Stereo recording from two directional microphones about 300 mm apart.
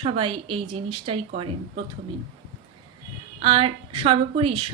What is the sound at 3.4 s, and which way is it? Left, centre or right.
Speech, centre.